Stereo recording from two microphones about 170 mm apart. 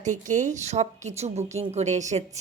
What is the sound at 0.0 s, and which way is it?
A woman's voice, 45° right (ahead or behind).